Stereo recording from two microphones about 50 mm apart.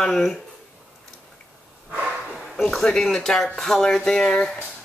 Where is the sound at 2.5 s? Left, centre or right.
Centre.